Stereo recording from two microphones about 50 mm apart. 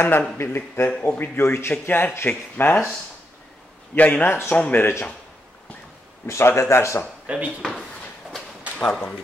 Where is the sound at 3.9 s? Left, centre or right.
Left.